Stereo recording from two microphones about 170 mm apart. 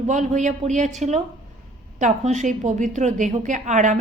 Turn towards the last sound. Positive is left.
turn(degrees=-45)  # may be behind; listen again after turning